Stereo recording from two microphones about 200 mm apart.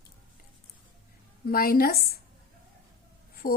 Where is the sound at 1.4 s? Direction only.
50° left (ahead or behind).